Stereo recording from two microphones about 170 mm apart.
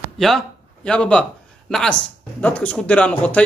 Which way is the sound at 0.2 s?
5° left (ahead or behind).